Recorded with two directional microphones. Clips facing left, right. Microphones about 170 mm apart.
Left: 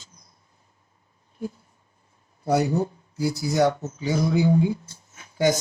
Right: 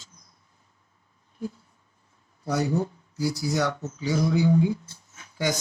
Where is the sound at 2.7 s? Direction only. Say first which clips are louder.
Left 2 dB; 25° left (ahead or behind).